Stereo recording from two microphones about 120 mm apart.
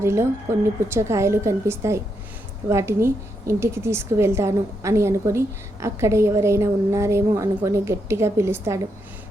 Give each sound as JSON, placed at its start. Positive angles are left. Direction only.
{"t": 0.0, "sound": "a woman's voice", "side_deg": -20}